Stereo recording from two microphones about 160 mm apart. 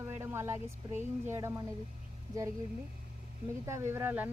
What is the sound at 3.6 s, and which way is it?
Speech, 15° right (ahead or behind).